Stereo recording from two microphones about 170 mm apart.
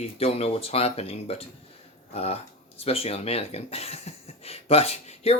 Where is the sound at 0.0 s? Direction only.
35° left (ahead or behind).